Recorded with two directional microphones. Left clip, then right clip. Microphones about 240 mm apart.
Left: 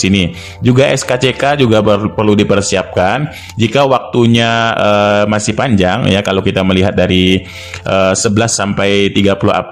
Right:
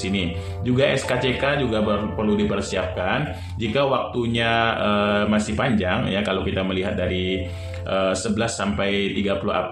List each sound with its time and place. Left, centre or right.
0.0 s speech: left